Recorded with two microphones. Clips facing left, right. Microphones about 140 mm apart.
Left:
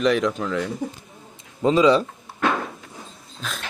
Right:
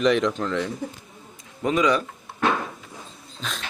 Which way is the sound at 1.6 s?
25° left (ahead or behind).